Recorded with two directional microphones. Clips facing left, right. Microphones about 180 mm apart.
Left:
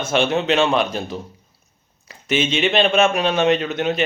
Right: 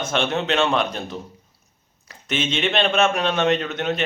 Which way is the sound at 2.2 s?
5° left (ahead or behind).